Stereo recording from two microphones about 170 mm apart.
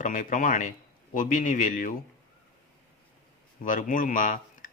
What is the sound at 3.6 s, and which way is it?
Speech, 50° left (ahead or behind).